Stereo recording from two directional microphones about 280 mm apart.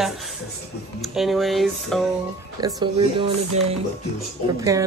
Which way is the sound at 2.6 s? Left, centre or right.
Centre.